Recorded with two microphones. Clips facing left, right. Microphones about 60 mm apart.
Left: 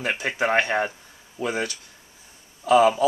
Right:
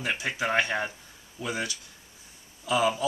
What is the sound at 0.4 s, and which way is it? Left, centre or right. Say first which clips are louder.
Speech: left 6 dB; left.